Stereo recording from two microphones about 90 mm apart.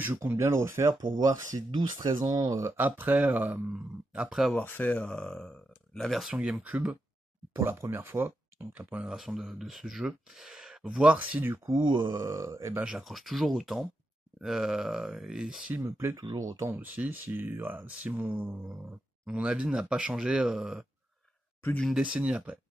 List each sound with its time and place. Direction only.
0.0 s speech: 20° right (ahead or behind)
1.1 s speech: 40° right (ahead or behind)
1.7 s speech: 60° right (ahead or behind)
2.8 s speech: 15° right (ahead or behind)
4.6 s speech: 20° left (ahead or behind); by 6.3 s centre (ahead or behind)
6.3 s speech: 15° right (ahead or behind)
7.5 s speech: 30° right (ahead or behind)
11.7 s speech: 60° right (ahead or behind)
12.2 s speech: 35° right (ahead or behind)
12.8 s speech: 5° right (ahead or behind)
15.8 s speech: 30° right (ahead or behind)
16.7 s speech: 20° right (ahead or behind)
21.8 s speech: 10° right (ahead or behind)